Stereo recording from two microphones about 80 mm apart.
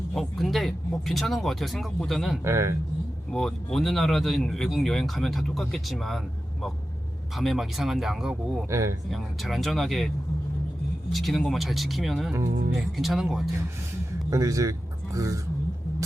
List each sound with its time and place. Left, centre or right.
0.2 s speech: centre
2.4 s a man's voice: right
3.3 s speech: centre
11.1 s speech: centre
14.3 s speech: right